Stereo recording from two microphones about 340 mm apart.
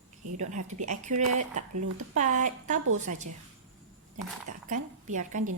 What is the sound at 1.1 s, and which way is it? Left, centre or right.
Speech, right.